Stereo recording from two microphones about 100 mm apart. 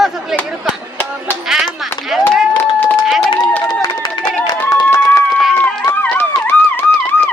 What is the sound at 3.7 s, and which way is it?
Run, 45° left (ahead or behind).